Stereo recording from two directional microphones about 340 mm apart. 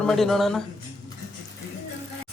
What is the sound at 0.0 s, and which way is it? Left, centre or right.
Speech, centre.